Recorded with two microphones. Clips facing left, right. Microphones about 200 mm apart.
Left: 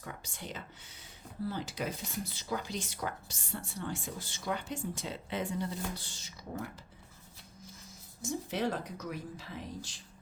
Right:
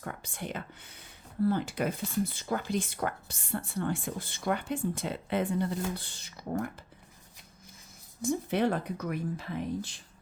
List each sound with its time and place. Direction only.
0.0 s speech: 55° right (ahead or behind)
8.2 s speech: 60° right (ahead or behind)